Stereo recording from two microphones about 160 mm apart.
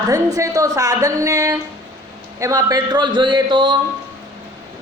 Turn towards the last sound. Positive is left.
turn(degrees=-30)  # may be behind; listen again after turning